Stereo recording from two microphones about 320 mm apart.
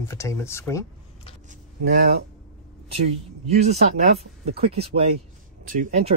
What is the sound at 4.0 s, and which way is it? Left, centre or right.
Speech, centre.